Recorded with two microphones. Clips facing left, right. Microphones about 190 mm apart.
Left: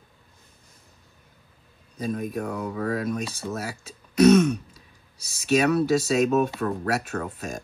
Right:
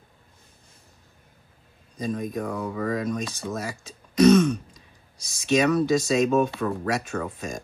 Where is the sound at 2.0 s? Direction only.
5° left (ahead or behind).